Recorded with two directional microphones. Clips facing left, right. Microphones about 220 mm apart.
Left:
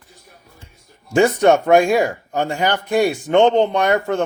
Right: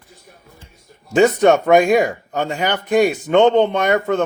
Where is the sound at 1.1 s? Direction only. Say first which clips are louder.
Right 1 dB; 20° right (ahead or behind).